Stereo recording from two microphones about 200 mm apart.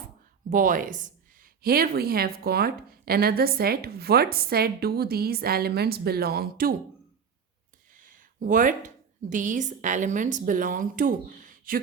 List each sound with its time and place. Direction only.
0.5 s a woman's voice: 40° right (ahead or behind)
7.9 s a sound: 40° right (ahead or behind)
9.3 s speech: 40° right (ahead or behind)